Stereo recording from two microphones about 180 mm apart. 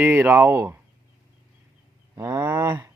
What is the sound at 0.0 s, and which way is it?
Speech, 10° right (ahead or behind).